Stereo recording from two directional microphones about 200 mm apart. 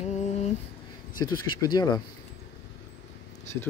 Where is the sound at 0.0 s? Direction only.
35° left (ahead or behind).